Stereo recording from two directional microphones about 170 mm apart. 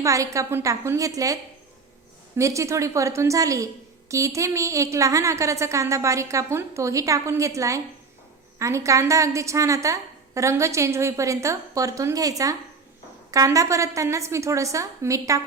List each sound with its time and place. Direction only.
0.0 s a woman's voice: 20° right (ahead or behind)